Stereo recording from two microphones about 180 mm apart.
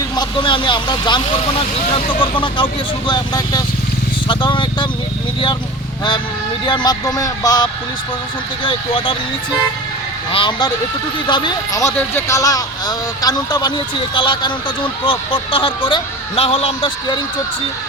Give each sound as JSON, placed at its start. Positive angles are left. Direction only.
{"t": 0.2, "sound": "speech", "side_deg": 25}
{"t": 6.7, "sound": "speech", "side_deg": 25}
{"t": 10.3, "sound": "speech", "side_deg": 25}